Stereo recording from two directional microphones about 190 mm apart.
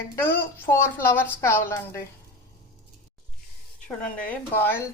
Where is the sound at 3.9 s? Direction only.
5° left (ahead or behind).